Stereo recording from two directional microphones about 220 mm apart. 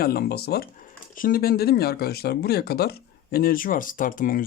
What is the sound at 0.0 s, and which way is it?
Speech, 45° left (ahead or behind).